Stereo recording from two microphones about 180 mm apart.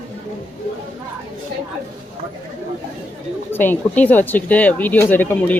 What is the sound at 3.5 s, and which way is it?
Speech, 10° left (ahead or behind).